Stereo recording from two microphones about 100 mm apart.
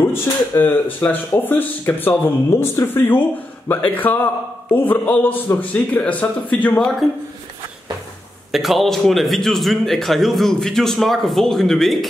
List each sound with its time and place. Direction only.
0.1 s speech: 20° left (ahead or behind)
8.5 s speech: centre (ahead or behind)